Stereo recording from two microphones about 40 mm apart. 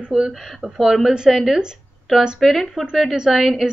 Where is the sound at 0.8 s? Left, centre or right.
Centre.